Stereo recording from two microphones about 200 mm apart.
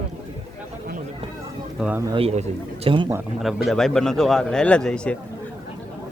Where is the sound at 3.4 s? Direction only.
Centre (ahead or behind).